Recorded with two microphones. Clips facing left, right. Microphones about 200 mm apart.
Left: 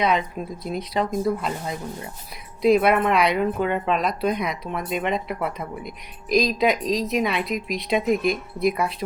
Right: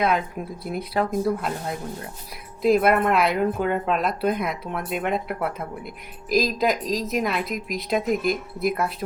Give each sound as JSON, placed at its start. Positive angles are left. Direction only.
{"t": 0.0, "sound": "speech", "side_deg": -5}